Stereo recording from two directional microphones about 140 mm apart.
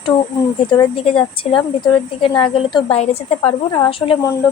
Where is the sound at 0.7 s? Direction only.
40° left (ahead or behind).